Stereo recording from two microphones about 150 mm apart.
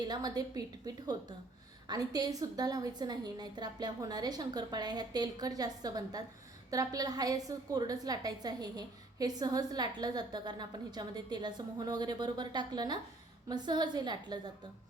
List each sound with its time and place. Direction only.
0.0 s a woman's voice: 25° right (ahead or behind)